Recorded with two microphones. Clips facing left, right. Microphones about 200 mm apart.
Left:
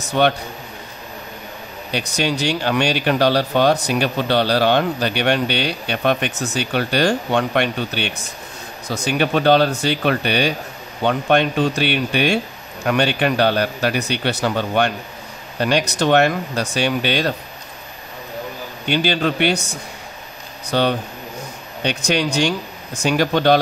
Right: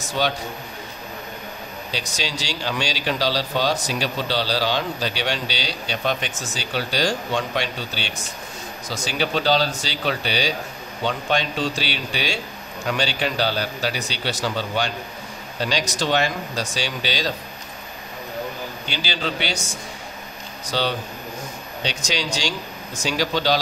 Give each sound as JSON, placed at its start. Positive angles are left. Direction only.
{"t": 0.0, "sound": "speech", "side_deg": 60}
{"t": 1.9, "sound": "speech", "side_deg": 60}
{"t": 18.9, "sound": "speech", "side_deg": 55}